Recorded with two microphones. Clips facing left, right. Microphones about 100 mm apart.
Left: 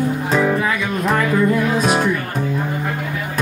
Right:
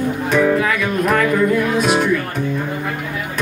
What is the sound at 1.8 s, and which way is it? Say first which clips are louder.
Music: right 1 dB; 40° left (ahead or behind).